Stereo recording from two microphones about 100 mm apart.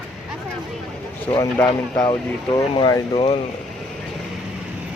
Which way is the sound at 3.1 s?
65° left (ahead or behind).